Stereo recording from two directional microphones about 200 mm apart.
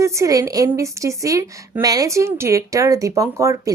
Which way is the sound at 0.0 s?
15° right (ahead or behind).